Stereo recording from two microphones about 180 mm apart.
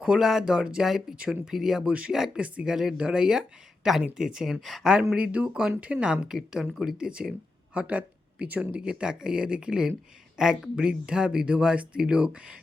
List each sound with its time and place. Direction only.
0.0 s speech: 5° right (ahead or behind)